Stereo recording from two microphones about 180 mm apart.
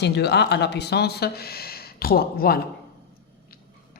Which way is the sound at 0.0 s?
70° left (ahead or behind).